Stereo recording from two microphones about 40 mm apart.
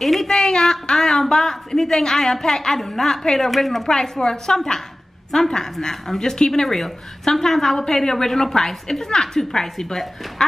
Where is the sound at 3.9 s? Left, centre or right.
Centre.